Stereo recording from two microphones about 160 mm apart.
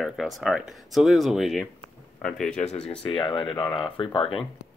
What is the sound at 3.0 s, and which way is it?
Speech, 35° left (ahead or behind).